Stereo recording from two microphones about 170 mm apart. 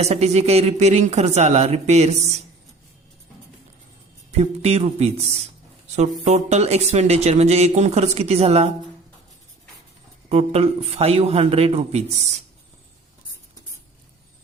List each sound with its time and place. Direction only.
0.0 s speech: 40° right (ahead or behind)
4.3 s speech: 40° right (ahead or behind)
10.2 s speech: 35° right (ahead or behind)